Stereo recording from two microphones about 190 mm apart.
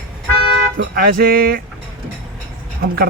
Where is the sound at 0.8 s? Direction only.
50° right (ahead or behind).